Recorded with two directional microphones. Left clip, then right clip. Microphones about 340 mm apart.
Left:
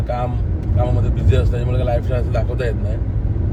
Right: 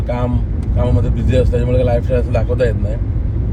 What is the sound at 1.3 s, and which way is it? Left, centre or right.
Speech, centre.